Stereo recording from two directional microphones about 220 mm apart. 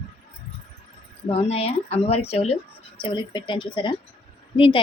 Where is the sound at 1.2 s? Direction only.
25° left (ahead or behind).